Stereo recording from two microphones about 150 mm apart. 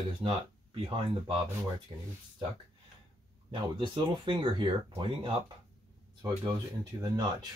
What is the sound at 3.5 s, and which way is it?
Speech, 35° right (ahead or behind).